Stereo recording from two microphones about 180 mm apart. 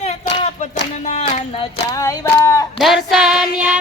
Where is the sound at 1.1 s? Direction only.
35° left (ahead or behind).